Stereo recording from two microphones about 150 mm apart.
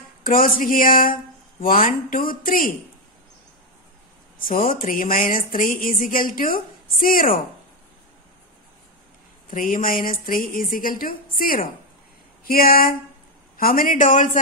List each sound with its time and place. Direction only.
0.2 s speech: 70° left (ahead or behind)
4.6 s speech: 65° left (ahead or behind)
9.5 s a man's voice: 60° left (ahead or behind)